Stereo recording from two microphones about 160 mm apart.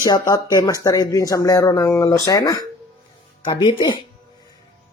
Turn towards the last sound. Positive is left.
turn(degrees=30)  # may be behind; listen again after turning